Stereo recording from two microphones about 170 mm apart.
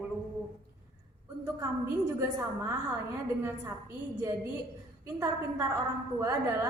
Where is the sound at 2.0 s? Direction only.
15° right (ahead or behind).